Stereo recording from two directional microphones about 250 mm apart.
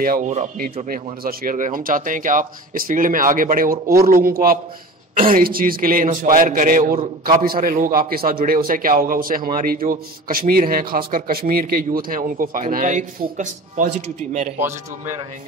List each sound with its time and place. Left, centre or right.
0.0 s a man's voice: right
14.6 s a man's voice: centre